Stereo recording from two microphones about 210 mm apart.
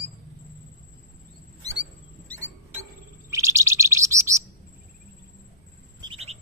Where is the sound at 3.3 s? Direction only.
15° right (ahead or behind).